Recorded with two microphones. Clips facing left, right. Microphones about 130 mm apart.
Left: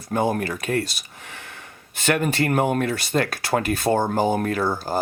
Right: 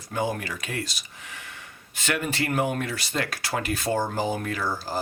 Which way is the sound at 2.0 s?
55° left (ahead or behind).